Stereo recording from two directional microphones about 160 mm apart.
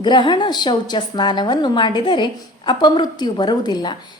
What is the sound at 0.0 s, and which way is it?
A woman's voice, 30° left (ahead or behind).